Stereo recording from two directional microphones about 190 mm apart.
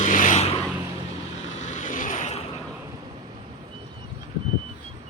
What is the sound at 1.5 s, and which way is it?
Vehicle, 40° left (ahead or behind).